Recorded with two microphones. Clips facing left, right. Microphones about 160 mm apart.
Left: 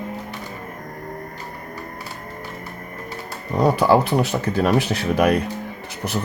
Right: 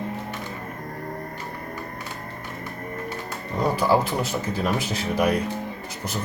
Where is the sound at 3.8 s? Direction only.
65° left (ahead or behind).